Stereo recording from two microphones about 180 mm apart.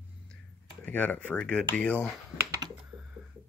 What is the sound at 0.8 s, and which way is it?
Speech, 10° left (ahead or behind).